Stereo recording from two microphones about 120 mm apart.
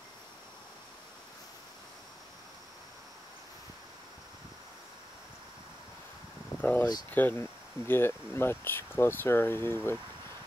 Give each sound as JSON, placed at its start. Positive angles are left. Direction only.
{"t": 6.6, "sound": "speech", "side_deg": 15}